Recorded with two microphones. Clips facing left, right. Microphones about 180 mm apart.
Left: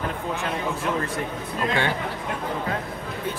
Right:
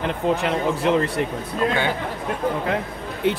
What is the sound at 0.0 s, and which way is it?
A man's voice, 75° right (ahead or behind).